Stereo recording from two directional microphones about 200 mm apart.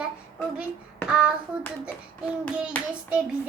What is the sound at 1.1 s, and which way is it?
Hands, 5° right (ahead or behind).